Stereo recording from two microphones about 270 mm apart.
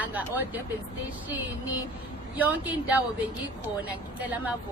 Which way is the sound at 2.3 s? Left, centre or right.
Centre.